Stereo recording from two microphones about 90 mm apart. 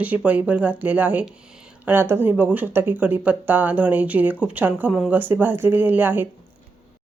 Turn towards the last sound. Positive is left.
turn(degrees=-25)  # may be behind; listen again after turning